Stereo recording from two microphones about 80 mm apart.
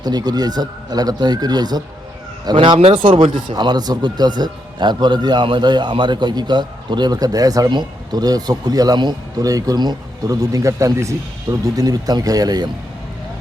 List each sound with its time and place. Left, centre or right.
0.0 s speech: right
2.4 s speech: right
3.5 s a man's voice: right
7.7 s speech: right
9.4 s speech: right
11.6 s speech: right